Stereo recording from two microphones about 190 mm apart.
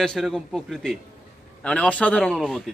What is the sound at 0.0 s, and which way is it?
A man's voice, centre (ahead or behind).